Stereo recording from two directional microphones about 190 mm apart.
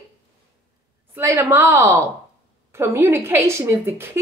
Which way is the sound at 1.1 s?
10° right (ahead or behind).